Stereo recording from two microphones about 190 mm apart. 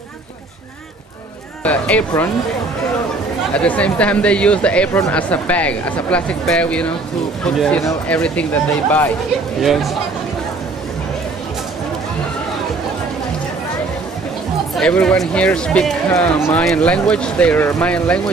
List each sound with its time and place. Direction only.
1.6 s speech: 5° left (ahead or behind)
3.5 s speech: 5° left (ahead or behind)
9.6 s speech: centre (ahead or behind)
14.8 s speech: 5° left (ahead or behind)